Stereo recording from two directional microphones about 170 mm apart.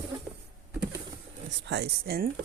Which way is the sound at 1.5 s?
85° right.